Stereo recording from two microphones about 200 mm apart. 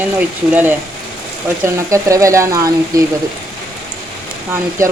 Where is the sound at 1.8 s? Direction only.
15° right (ahead or behind).